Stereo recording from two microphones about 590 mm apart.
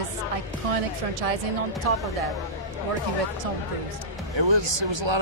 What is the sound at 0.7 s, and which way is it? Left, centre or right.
Speech, right.